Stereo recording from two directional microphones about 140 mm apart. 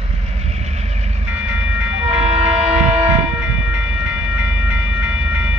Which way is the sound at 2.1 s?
45° right (ahead or behind).